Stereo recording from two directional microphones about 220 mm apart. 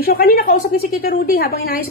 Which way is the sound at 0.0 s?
45° left (ahead or behind).